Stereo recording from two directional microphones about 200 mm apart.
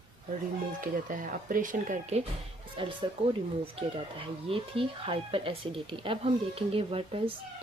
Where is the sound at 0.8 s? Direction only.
40° right (ahead or behind).